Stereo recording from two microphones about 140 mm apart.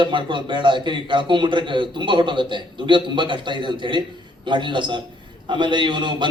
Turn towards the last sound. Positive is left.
turn(degrees=-35)  # may be behind; listen again after turning